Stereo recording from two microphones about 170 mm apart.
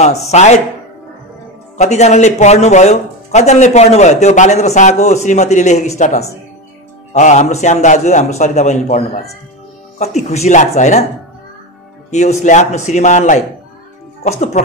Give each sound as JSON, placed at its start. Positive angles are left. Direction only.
{"t": 0.0, "sound": "speech", "side_deg": 40}
{"t": 1.8, "sound": "speech", "side_deg": 40}
{"t": 12.1, "sound": "speech", "side_deg": 40}